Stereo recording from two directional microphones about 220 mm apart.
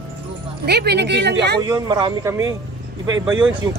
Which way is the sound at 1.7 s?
20° right (ahead or behind).